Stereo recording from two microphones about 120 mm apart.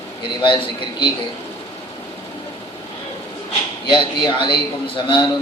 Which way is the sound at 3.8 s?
40° left (ahead or behind).